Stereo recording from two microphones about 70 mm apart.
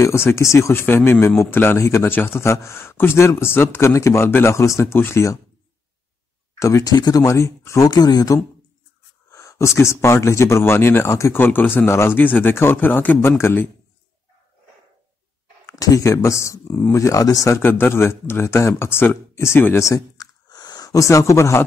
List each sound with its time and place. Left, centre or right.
0.0 s a man's voice: left
0.8 s speech: left
2.4 s speech: left
6.8 s speech: left
7.2 s a man's voice: left
7.9 s speech: left
9.3 s a man's voice: left
11.3 s speech: left
12.2 s speech: left
15.6 s a man's voice: left
17.6 s speech: left
19.9 s squish: left
20.9 s a man's voice: left